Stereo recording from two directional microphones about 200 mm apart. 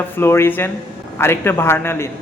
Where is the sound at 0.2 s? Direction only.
10° left (ahead or behind).